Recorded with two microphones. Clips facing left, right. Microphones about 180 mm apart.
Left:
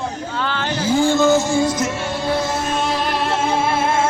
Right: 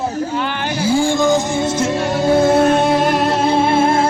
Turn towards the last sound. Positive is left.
turn(degrees=-35)  # may be behind; listen again after turning